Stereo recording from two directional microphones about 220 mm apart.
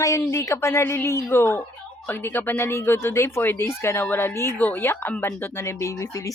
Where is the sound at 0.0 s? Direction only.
15° left (ahead or behind).